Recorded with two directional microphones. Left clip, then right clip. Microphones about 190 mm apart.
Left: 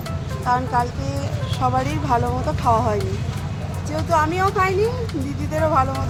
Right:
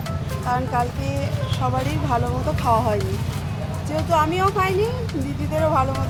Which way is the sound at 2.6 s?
15° left (ahead or behind).